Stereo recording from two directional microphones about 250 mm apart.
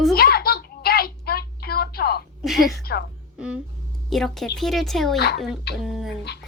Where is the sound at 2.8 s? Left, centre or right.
Left.